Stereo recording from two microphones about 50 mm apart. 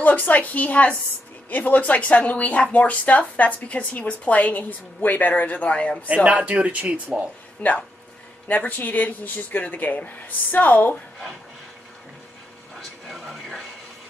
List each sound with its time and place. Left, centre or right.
0.0 s a woman's voice: left
6.0 s speech: right
7.6 s a woman's voice: left
13.1 s speech: centre